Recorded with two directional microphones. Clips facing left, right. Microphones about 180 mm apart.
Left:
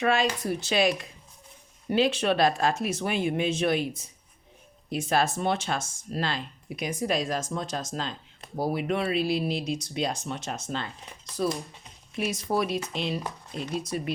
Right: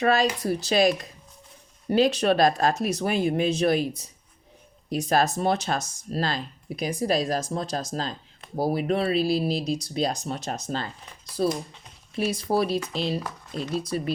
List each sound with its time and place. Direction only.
0.0 s speech: 40° right (ahead or behind)